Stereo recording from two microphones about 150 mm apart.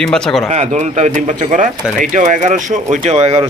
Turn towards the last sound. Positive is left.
turn(degrees=-45)  # may be behind; listen again after turning